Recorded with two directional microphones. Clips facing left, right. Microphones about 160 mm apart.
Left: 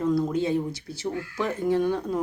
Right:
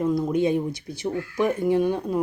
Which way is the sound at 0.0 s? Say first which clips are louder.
Right 2 dB; 15° right (ahead or behind).